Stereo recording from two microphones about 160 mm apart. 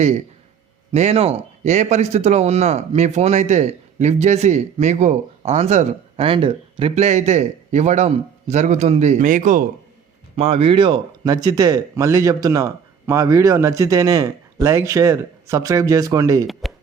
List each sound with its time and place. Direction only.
0.9 s speech: 40° right (ahead or behind)
10.3 s speech: 40° right (ahead or behind); by 16.5 s 20° right (ahead or behind)
16.5 s a sound: centre (ahead or behind)